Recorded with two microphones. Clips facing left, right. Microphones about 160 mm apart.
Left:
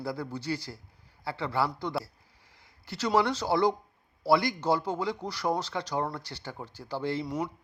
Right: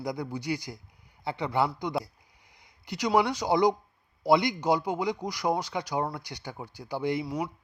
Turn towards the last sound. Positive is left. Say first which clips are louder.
# even
turn(degrees=0)  # may be behind; listen again after turning